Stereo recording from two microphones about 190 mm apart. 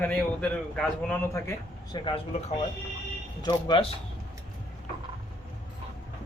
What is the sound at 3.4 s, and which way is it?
Speech, 25° left (ahead or behind).